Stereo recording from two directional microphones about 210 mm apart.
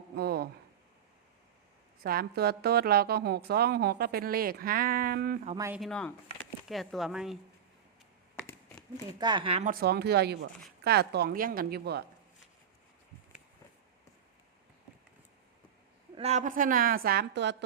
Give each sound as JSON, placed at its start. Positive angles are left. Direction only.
{"t": 0.2, "sound": "a sound", "side_deg": -50}
{"t": 2.0, "sound": "a woman's voice", "side_deg": -45}
{"t": 5.5, "sound": "speech", "side_deg": -10}
{"t": 5.8, "sound": "speech", "side_deg": 5}
{"t": 9.2, "sound": "speech", "side_deg": -25}
{"t": 9.6, "sound": "a woman's voice", "side_deg": -50}
{"t": 16.1, "sound": "a woman's voice", "side_deg": -30}